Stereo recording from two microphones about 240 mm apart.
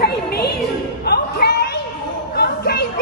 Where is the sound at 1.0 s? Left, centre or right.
Left.